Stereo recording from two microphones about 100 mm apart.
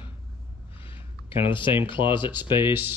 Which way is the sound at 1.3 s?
60° left (ahead or behind).